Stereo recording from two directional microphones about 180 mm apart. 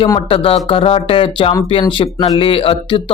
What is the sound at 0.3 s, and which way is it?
A man's voice, 30° left (ahead or behind).